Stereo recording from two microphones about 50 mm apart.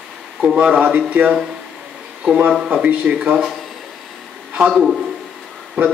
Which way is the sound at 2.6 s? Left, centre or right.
Right.